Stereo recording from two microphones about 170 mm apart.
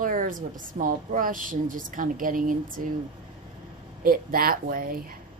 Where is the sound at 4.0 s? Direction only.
55° right (ahead or behind).